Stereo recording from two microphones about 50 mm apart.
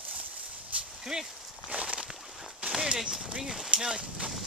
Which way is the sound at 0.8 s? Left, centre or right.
Centre.